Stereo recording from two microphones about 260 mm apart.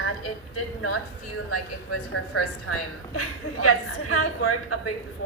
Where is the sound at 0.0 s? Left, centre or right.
Left.